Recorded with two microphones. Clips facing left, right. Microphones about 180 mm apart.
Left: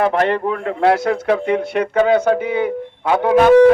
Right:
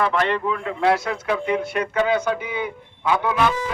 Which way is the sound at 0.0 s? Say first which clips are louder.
Left 5 dB; 50° left (ahead or behind).